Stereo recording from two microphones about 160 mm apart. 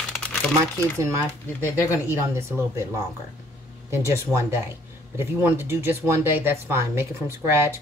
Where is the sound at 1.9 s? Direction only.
15° right (ahead or behind).